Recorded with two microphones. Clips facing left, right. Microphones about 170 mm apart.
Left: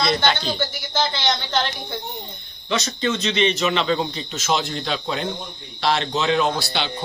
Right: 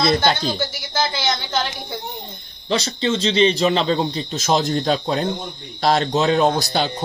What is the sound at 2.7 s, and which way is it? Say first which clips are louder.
A man's voice: right 2 dB; 30° right (ahead or behind).